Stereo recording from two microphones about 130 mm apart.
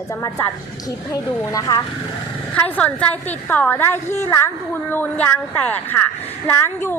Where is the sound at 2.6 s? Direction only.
10° left (ahead or behind).